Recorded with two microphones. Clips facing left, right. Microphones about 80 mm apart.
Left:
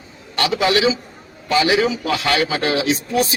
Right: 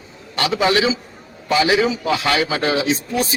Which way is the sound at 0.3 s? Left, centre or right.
Right.